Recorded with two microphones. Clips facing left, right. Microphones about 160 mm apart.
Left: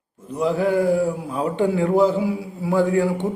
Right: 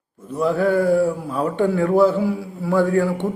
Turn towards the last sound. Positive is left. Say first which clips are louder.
# right 1 dB
turn(degrees=20)  # may be behind; listen again after turning